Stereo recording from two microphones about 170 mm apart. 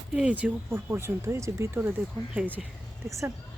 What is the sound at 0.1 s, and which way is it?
Speech, 5° right (ahead or behind).